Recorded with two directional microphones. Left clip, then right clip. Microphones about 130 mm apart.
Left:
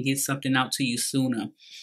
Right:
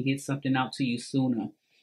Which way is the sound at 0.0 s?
20° left (ahead or behind).